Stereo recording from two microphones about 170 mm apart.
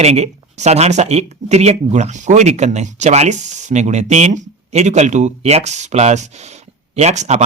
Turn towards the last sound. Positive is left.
turn(degrees=-45)  # may be behind; listen again after turning